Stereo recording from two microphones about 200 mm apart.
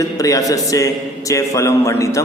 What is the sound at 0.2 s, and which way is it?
A man's voice, 15° left (ahead or behind).